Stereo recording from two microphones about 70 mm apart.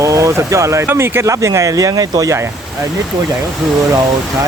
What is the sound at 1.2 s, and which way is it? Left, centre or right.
Speech, right.